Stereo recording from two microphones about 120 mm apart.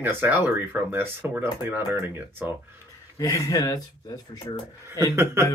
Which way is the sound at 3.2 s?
25° left (ahead or behind).